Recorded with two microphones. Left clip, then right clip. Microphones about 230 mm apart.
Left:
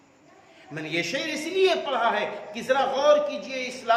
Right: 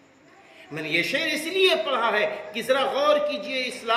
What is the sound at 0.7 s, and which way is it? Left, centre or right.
A man's voice, centre.